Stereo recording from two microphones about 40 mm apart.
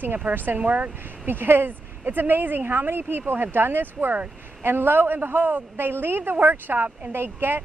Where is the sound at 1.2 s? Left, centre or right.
Right.